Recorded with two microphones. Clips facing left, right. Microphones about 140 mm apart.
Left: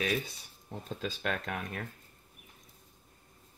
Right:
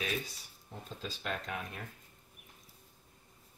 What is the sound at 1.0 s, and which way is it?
Speech, 70° left (ahead or behind).